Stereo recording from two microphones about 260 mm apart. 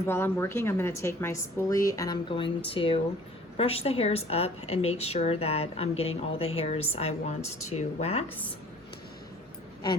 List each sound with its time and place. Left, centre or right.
0.0 s a woman's voice: centre; by 8.2 s left